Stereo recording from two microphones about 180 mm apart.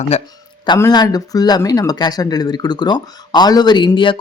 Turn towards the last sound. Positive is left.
turn(degrees=25)  # may be behind; listen again after turning